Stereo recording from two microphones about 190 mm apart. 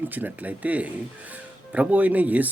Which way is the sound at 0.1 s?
10° right (ahead or behind).